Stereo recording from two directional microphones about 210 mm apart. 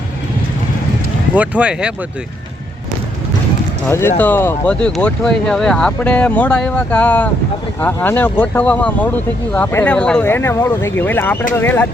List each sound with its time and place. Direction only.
1.4 s speech: 5° right (ahead or behind)
3.8 s speech: 10° left (ahead or behind)